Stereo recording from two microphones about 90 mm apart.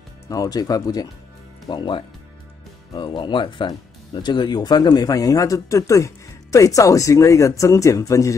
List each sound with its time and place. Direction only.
0.3 s speech: 45° left (ahead or behind)
1.7 s speech: 60° left (ahead or behind); by 8.4 s 35° left (ahead or behind)